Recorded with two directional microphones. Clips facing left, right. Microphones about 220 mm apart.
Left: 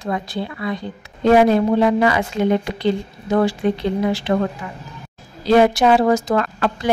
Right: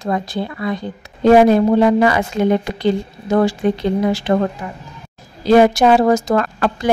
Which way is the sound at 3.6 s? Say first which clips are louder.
Right 2 dB; 45° right (ahead or behind).